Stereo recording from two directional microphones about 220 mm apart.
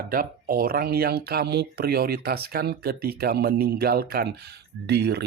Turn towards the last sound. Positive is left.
turn(degrees=-50)  # may be behind; listen again after turning